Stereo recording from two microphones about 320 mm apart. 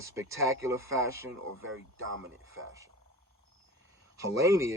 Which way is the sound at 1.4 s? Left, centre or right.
Right.